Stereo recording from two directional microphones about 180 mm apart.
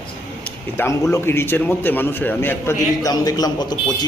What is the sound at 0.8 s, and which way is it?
A man's voice, 15° left (ahead or behind).